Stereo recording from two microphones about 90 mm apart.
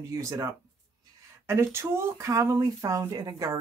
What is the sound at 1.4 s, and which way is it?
Speech, 30° right (ahead or behind).